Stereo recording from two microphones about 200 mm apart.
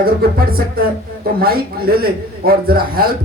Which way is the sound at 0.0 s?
50° right (ahead or behind).